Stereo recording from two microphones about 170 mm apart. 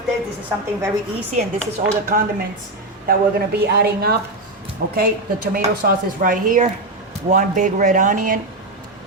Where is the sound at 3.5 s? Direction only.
70° right (ahead or behind).